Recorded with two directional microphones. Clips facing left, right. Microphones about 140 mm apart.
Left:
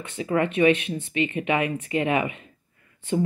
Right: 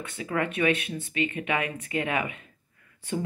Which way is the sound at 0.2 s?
25° left (ahead or behind).